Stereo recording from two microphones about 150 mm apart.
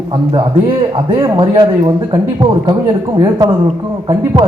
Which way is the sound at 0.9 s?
30° right (ahead or behind).